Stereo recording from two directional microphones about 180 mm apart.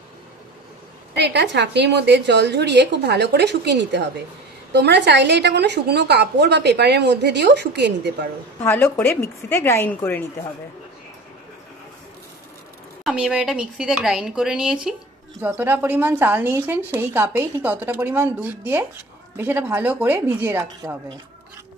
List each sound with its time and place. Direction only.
1.1 s a woman's voice: 75° right (ahead or behind)
8.6 s a woman's voice: 10° left (ahead or behind)
13.0 s speech: 5° right (ahead or behind)